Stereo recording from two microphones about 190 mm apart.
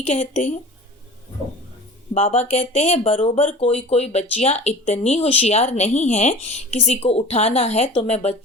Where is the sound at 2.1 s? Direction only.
35° left (ahead or behind).